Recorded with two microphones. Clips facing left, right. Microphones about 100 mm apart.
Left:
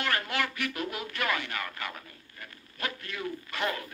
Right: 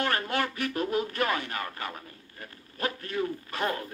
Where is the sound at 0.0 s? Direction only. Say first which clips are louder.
Right 2 dB; 35° right (ahead or behind).